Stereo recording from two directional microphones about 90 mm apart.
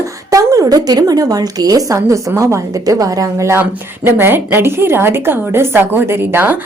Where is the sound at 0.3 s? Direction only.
40° right (ahead or behind).